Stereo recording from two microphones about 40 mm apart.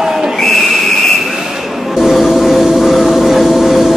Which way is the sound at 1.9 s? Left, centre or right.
Centre.